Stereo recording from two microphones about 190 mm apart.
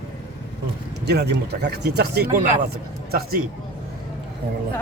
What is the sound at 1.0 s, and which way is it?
Speech, 60° right (ahead or behind).